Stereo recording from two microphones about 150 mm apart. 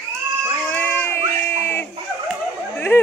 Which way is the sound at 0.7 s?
15° left (ahead or behind).